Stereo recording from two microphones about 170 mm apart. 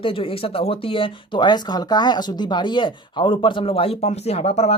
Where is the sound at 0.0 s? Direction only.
35° left (ahead or behind).